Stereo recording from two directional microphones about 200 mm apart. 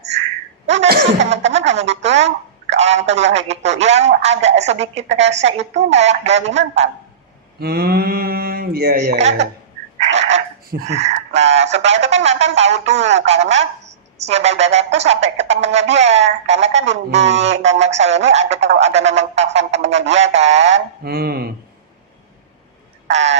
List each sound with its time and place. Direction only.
1.2 s speech: 35° right (ahead or behind)
7.6 s mantra: 50° right (ahead or behind)
10.7 s speech: 50° right (ahead or behind)
10.9 s speech: 35° right (ahead or behind)
21.0 s mantra: 50° right (ahead or behind)
23.1 s speech: 35° right (ahead or behind)